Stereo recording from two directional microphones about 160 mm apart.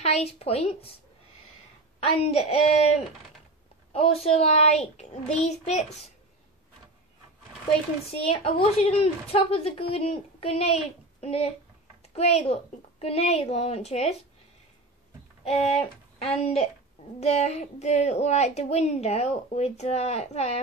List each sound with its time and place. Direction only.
0.0 s a woman's voice: 40° left (ahead or behind)
2.0 s a woman's voice: 40° left (ahead or behind)
8.3 s a woman's voice: 40° left (ahead or behind)
15.4 s a child's voice: 40° left (ahead or behind)